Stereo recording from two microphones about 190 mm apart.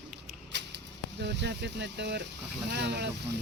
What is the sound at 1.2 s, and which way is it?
Speech, 65° right (ahead or behind).